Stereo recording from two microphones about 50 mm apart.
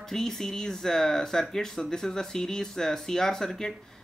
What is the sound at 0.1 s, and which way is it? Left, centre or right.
Speech, centre.